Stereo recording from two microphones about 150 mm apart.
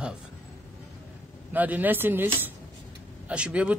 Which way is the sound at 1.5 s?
10° right (ahead or behind).